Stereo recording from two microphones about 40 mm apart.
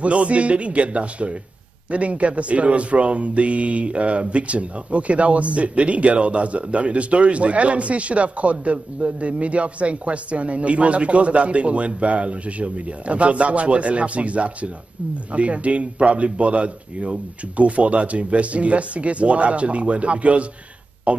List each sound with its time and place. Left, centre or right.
0.0 s speech: right